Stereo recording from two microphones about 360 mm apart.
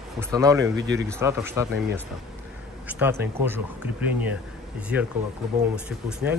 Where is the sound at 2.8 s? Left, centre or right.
Centre.